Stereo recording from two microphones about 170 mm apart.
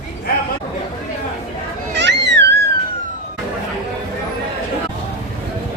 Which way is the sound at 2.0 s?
90° right.